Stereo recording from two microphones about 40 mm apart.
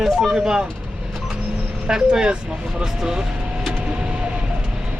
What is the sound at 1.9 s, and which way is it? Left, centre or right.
Speech, right.